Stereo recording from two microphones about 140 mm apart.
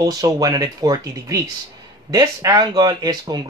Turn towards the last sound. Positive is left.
turn(degrees=-30)  # may be behind; listen again after turning